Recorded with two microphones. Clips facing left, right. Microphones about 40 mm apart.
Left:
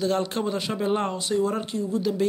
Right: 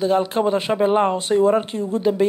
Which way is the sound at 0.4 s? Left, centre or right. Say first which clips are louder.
Right 8 dB; right.